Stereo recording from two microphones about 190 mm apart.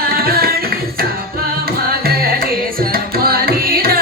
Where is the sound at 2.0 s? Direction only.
50° right (ahead or behind).